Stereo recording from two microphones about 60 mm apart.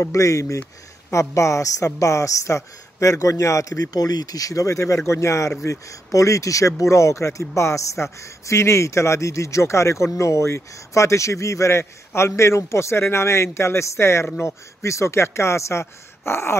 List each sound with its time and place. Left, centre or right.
0.0 s a man's voice: left